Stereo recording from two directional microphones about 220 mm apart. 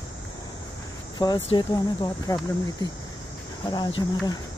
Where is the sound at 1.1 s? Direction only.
20° left (ahead or behind).